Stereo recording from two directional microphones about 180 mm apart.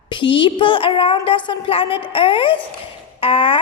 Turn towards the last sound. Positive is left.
turn(degrees=30)  # may be behind; listen again after turning